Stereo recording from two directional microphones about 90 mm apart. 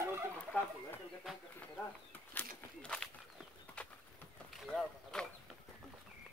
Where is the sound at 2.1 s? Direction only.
20° left (ahead or behind).